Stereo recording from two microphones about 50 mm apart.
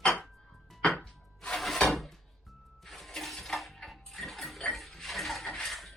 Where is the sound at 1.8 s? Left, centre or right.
Centre.